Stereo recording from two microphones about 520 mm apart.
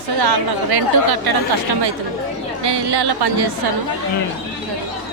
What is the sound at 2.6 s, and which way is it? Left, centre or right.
Speech, right.